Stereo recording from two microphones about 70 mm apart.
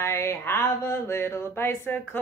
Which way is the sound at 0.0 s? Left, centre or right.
Left.